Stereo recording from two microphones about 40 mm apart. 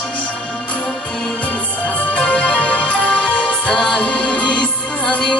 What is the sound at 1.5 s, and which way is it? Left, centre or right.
Music, left.